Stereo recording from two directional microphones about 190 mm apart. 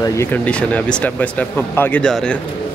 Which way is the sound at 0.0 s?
10° left (ahead or behind).